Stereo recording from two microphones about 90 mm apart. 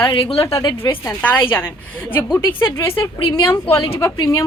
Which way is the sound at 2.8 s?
70° left (ahead or behind).